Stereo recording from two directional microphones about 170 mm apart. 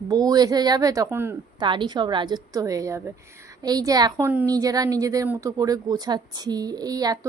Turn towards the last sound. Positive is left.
turn(degrees=-20)  # may be behind; listen again after turning